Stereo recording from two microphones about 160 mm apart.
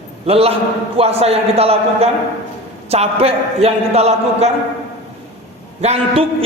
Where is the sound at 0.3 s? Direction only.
40° right (ahead or behind).